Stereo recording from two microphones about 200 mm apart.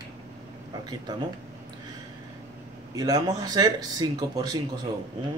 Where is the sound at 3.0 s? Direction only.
20° right (ahead or behind).